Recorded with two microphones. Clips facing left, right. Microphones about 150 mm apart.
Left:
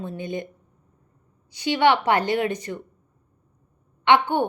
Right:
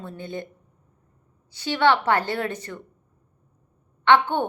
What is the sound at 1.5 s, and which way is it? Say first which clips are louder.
A woman's voice: left 1 dB; 15° left (ahead or behind).